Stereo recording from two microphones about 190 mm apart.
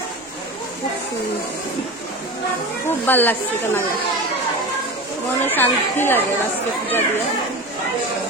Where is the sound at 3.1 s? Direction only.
10° left (ahead or behind).